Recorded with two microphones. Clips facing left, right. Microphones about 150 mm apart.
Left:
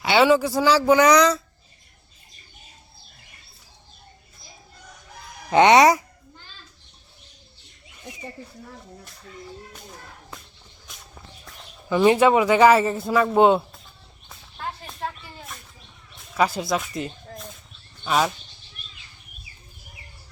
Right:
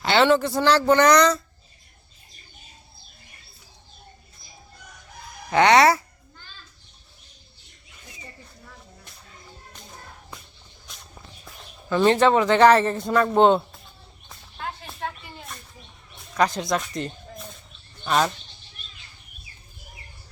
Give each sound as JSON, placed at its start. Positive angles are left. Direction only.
{"t": 0.0, "sound": "a man's voice", "side_deg": 10}
{"t": 5.5, "sound": "speech", "side_deg": 20}
{"t": 11.9, "sound": "a man's voice", "side_deg": 10}
{"t": 14.3, "sound": "a sound", "side_deg": 0}
{"t": 16.3, "sound": "speech", "side_deg": 5}